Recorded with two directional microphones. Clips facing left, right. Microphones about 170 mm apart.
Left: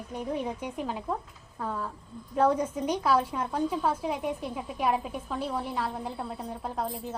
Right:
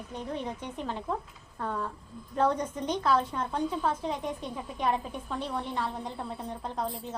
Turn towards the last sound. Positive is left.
turn(degrees=5)  # may be behind; listen again after turning